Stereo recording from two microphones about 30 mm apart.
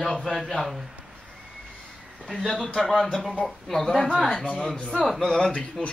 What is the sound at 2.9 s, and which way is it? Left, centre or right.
Speech, centre.